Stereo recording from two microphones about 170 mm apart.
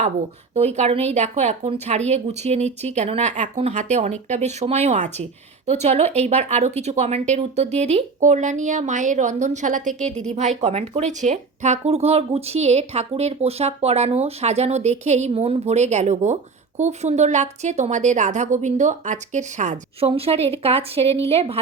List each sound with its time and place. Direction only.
0.5 s speech: 40° right (ahead or behind)